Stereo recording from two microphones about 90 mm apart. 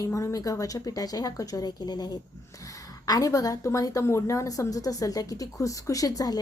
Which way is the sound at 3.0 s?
40° left (ahead or behind).